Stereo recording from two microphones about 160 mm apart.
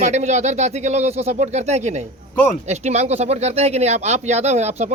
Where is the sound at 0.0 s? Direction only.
45° right (ahead or behind).